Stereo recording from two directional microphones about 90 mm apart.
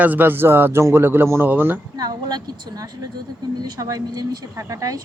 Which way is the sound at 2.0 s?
50° right (ahead or behind).